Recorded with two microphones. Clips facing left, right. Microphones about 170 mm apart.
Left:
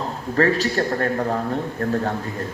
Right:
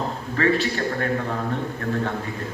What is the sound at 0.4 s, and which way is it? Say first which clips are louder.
Speech: left 3 dB; 40° left (ahead or behind).